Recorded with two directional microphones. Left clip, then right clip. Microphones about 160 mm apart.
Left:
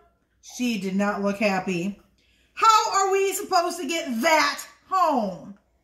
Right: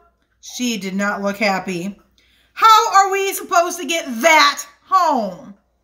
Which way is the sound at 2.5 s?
Centre (ahead or behind).